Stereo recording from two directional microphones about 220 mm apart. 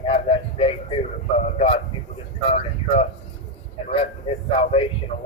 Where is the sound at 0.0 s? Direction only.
25° left (ahead or behind).